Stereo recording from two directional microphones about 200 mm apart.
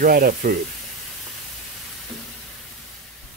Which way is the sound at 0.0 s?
45° right (ahead or behind).